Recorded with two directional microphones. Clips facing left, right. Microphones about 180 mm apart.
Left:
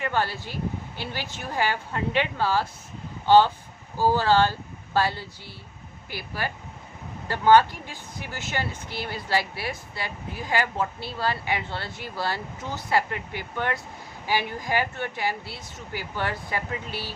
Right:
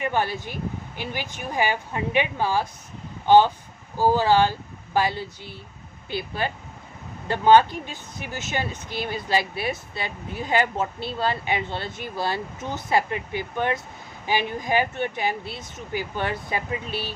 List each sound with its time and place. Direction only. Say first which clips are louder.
0.0 s speech: right 2 dB; 15° right (ahead or behind)